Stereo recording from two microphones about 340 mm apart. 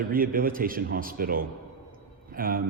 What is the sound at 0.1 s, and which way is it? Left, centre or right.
Speech, right.